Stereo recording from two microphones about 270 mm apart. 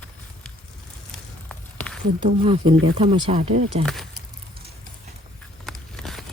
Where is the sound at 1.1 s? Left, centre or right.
Centre.